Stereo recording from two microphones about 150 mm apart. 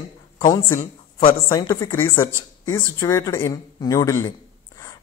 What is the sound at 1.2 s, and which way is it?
A man's voice, 30° left (ahead or behind).